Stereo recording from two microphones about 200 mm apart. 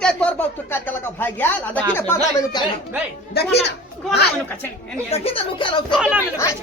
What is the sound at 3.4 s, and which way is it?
Speech, 55° left (ahead or behind).